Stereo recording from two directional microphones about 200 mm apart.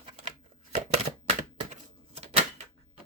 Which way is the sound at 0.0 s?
30° right (ahead or behind).